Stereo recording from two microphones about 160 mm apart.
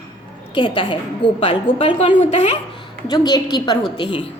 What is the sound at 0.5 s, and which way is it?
A woman's voice, 35° left (ahead or behind).